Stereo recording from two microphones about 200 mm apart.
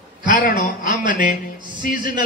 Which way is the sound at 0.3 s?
40° left (ahead or behind).